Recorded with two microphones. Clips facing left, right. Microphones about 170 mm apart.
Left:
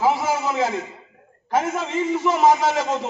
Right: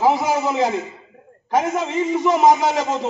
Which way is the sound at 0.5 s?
20° right (ahead or behind).